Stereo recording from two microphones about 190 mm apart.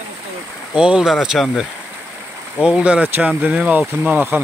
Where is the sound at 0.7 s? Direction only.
5° right (ahead or behind).